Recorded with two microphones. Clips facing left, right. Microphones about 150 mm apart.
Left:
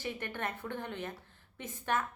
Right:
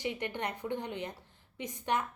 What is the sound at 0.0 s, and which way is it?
A woman's voice, 15° right (ahead or behind).